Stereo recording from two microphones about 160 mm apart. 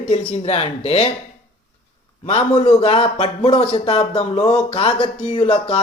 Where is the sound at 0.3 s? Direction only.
40° left (ahead or behind).